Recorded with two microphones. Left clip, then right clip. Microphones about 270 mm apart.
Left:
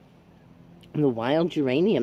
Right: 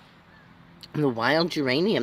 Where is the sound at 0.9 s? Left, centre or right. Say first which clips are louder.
Right 1 dB; right.